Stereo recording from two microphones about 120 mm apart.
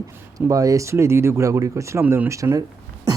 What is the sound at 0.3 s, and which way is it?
A man's voice, 30° right (ahead or behind).